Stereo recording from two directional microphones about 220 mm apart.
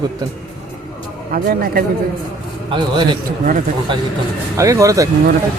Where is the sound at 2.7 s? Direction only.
20° right (ahead or behind).